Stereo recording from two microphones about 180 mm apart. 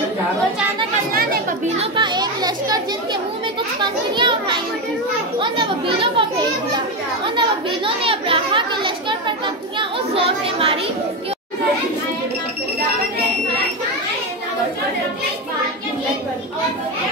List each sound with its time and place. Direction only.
1.8 s children playing: 25° right (ahead or behind)
3.8 s a child's voice: 25° right (ahead or behind)
5.4 s a child's voice: 30° right (ahead or behind)
7.3 s chatter: 30° right (ahead or behind)
9.8 s a child's voice: 30° right (ahead or behind)